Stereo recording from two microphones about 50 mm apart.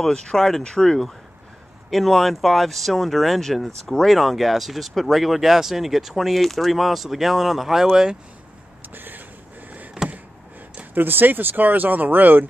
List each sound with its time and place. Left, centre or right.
0.0 s speech: centre
8.8 s a sound: right
11.0 s speech: right